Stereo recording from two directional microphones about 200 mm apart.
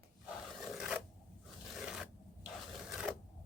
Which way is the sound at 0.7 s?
Centre (ahead or behind).